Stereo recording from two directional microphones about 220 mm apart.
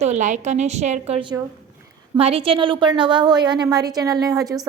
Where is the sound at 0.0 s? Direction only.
30° right (ahead or behind).